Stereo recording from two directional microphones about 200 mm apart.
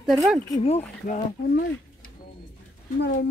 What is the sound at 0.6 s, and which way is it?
Speech, 35° left (ahead or behind).